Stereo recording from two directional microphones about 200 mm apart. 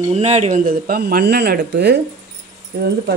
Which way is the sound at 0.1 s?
35° right (ahead or behind).